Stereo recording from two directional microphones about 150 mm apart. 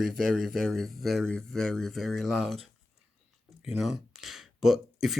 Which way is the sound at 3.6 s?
Centre (ahead or behind).